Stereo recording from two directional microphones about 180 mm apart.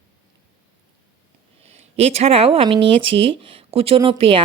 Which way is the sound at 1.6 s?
35° right (ahead or behind).